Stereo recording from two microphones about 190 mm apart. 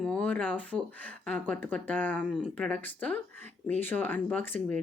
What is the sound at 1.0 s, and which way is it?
Speech, 5° left (ahead or behind).